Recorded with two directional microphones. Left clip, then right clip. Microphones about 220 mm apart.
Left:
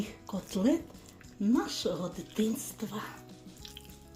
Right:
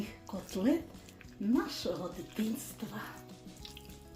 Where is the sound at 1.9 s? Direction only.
35° left (ahead or behind).